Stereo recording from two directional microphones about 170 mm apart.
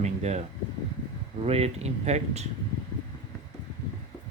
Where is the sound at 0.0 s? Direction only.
40° right (ahead or behind).